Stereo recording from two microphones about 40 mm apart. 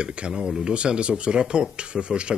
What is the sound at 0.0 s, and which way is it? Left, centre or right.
Speech, right.